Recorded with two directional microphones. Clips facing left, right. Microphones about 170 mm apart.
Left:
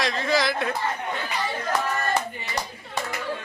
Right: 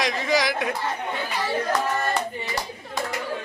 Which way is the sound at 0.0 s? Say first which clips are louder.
Right 1 dB; 15° right (ahead or behind).